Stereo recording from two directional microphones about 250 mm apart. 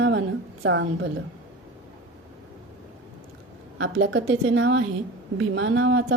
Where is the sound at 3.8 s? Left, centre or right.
Right.